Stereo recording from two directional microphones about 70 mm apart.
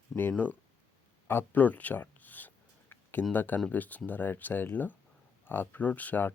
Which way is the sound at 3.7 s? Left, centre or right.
Left.